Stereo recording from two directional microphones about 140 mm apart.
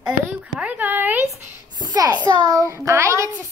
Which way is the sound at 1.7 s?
30° right (ahead or behind).